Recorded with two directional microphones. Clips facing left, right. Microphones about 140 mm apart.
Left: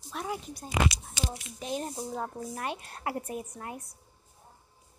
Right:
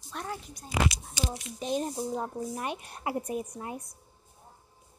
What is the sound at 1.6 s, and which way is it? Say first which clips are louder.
Speech: right 4 dB; 20° right (ahead or behind).